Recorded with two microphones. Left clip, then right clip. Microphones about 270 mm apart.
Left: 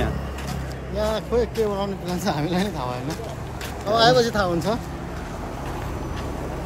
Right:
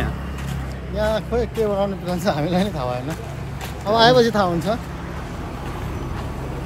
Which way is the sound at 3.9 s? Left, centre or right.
Right.